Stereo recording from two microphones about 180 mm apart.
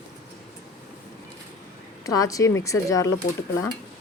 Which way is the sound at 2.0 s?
20° left (ahead or behind).